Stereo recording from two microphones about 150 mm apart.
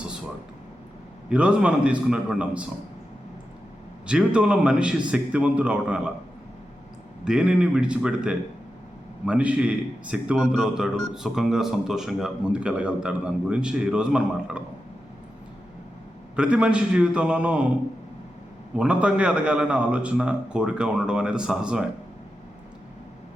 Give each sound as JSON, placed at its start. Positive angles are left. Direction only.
{"t": 1.3, "sound": "a man's voice", "side_deg": -5}
{"t": 4.0, "sound": "a man's voice", "side_deg": -5}
{"t": 7.3, "sound": "a man's voice", "side_deg": -5}
{"t": 16.3, "sound": "a man's voice", "side_deg": -5}
{"t": 18.8, "sound": "a man's voice", "side_deg": -10}